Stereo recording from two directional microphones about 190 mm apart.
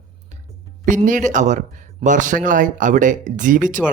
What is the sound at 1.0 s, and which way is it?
Speech, 40° right (ahead or behind).